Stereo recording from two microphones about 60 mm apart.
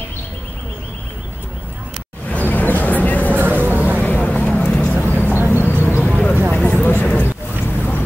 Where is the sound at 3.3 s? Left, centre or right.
Right.